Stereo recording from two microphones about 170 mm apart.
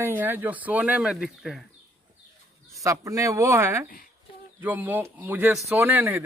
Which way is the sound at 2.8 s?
20° right (ahead or behind).